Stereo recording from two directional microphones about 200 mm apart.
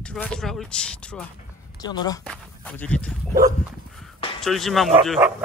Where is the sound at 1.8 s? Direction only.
20° left (ahead or behind).